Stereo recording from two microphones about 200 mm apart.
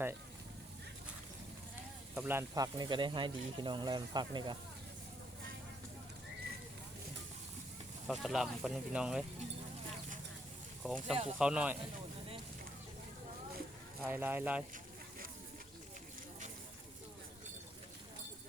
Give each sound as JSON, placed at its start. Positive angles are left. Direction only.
{"t": 2.1, "sound": "speech", "side_deg": -10}
{"t": 8.0, "sound": "speech", "side_deg": 0}
{"t": 10.8, "sound": "speech", "side_deg": 0}
{"t": 14.0, "sound": "speech", "side_deg": -10}